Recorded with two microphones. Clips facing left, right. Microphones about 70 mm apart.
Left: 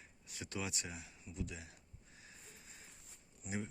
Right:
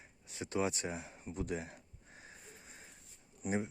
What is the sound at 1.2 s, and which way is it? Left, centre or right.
Speech, right.